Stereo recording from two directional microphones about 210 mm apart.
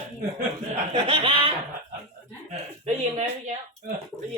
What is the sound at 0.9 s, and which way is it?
Speech, 25° right (ahead or behind).